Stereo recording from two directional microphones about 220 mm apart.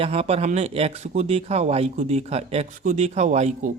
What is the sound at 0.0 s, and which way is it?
Speech, 25° right (ahead or behind).